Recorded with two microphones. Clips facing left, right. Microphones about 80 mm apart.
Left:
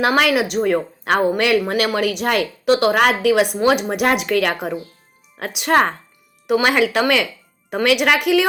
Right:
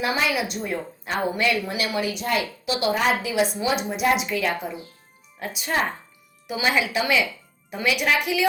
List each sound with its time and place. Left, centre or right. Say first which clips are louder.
0.0 s a woman's voice: left 8 dB; left
6.5 s a woman's voice: left 7 dB; left